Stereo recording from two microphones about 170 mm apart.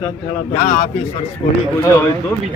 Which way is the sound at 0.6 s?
45° left (ahead or behind).